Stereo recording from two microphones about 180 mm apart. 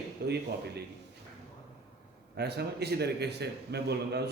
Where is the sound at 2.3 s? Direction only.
65° right (ahead or behind).